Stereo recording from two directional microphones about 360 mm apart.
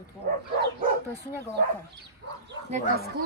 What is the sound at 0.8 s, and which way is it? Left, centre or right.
Bow-wow, right.